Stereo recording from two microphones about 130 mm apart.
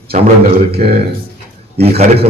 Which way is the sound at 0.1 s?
75° right (ahead or behind).